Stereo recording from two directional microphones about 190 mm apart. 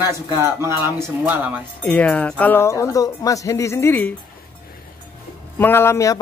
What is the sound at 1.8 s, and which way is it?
Speech, 5° left (ahead or behind).